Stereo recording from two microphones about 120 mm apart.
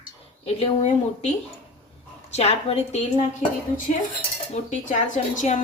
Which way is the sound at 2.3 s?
60° left (ahead or behind).